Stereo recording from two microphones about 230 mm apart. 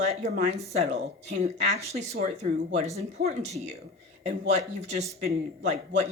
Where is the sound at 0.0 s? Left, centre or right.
Right.